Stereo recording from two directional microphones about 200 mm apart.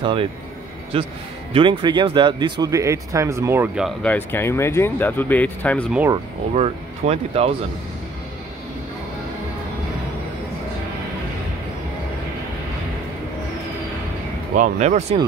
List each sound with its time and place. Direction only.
0.0 s a man's voice: 25° right (ahead or behind); by 5.9 s 5° left (ahead or behind)
6.5 s speech: 30° right (ahead or behind)
14.5 s speech: 40° right (ahead or behind)